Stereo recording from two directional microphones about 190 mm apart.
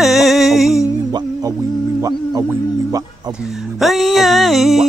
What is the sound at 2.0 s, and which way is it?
Speech, 20° right (ahead or behind).